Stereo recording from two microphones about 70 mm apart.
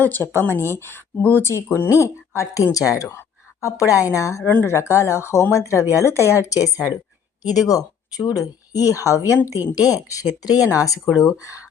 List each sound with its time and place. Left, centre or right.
0.0 s a woman's voice: left
6.4 s a woman's voice: left
9.7 s a woman's voice: left